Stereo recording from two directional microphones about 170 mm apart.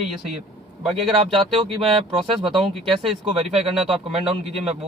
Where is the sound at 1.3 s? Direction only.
35° right (ahead or behind).